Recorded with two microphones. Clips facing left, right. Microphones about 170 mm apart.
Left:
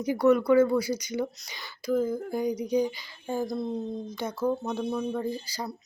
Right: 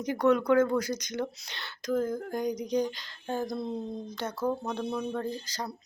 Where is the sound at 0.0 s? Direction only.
10° left (ahead or behind).